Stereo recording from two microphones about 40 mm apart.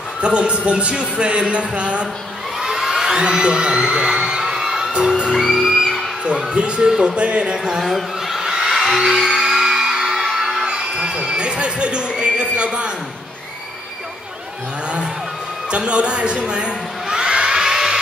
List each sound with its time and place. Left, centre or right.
0.2 s speech: right
2.7 s whoop: centre
4.9 s speech: right
5.6 s music: centre
6.2 s speech: right
6.9 s music: centre
7.2 s speech: right
7.5 s music: centre
7.8 s a sound: centre
8.9 s music: centre
10.6 s speech: right
15.7 s crowd: right; by 17.9 s centre